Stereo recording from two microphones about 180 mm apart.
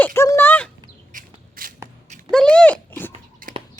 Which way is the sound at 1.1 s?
50° right (ahead or behind).